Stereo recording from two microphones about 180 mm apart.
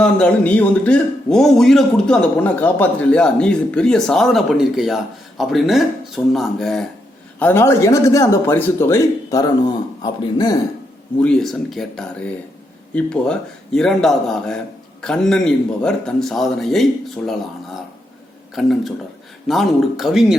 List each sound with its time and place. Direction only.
0.0 s a man's voice: 5° left (ahead or behind); by 10.6 s 20° left (ahead or behind)
11.2 s speech: 5° left (ahead or behind)
18.5 s speech: centre (ahead or behind)